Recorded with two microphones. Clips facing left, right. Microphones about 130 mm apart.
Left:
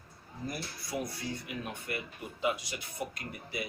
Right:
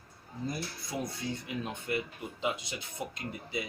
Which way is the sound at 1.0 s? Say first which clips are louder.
Right 2 dB; 25° right (ahead or behind).